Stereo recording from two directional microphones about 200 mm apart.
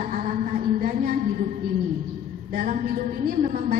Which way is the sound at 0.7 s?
45° right (ahead or behind).